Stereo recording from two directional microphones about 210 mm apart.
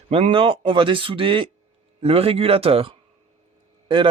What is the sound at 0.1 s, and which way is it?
Speech, 25° right (ahead or behind).